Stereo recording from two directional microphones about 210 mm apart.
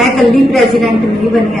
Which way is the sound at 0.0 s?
Centre (ahead or behind).